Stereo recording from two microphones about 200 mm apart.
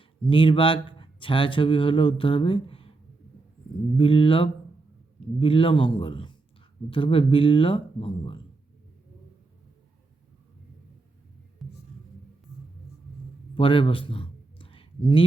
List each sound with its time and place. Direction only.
0.0 s speech: 25° left (ahead or behind)
3.9 s speech: 25° left (ahead or behind)
11.6 s hum: centre (ahead or behind)
13.6 s a sound: 25° left (ahead or behind)